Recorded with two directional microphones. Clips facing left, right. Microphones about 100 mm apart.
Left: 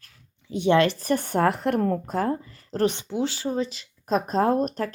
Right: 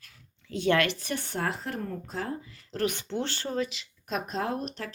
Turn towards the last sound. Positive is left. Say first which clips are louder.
# left 10 dB
turn(degrees=45)  # may be behind; listen again after turning